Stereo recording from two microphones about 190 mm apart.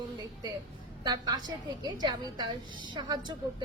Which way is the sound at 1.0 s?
20° right (ahead or behind).